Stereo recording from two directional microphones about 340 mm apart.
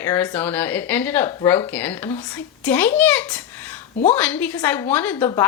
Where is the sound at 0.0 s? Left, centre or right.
Centre.